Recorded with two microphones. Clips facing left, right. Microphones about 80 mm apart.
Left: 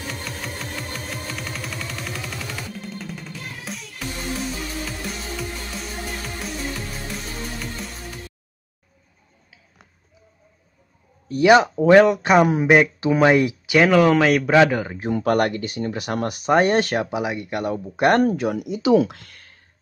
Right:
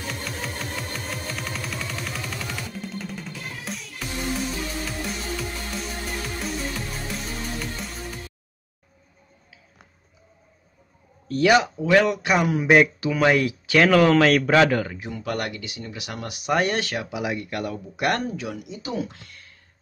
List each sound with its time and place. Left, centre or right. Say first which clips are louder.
0.1 s music: right 2 dB; centre
11.2 s speech: left 4 dB; centre
11.5 s speech: left 5 dB; left
12.1 s speech: left 6 dB; left; by 14.9 s centre
15.0 s speech: left 9 dB; left
16.5 s speech: left 6 dB; left
17.2 s speech: left 3 dB; left
18.2 s speech: left 9 dB; left
18.8 s speech: left 15 dB; left